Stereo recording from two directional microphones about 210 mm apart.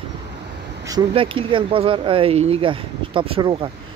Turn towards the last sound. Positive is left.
turn(degrees=-25)  # may be behind; listen again after turning